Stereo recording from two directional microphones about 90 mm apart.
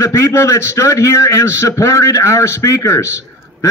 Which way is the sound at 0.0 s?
35° left (ahead or behind).